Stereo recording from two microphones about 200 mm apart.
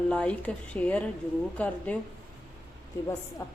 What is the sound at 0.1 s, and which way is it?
Speech, 5° left (ahead or behind).